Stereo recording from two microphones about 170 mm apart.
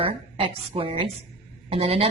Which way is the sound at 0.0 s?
30° right (ahead or behind).